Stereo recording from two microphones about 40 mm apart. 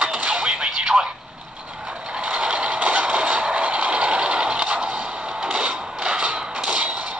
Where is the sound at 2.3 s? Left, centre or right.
Right.